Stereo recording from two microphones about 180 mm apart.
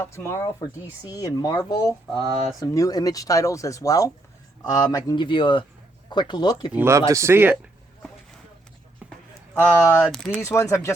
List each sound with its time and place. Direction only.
0.0 s speech: 15° left (ahead or behind)
6.7 s speech: 15° right (ahead or behind)
9.6 s speech: 10° left (ahead or behind)